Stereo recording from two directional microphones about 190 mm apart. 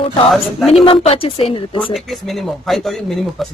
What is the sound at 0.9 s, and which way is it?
Speech, 30° left (ahead or behind).